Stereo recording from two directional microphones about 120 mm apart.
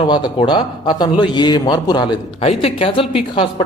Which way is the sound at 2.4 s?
55° left (ahead or behind).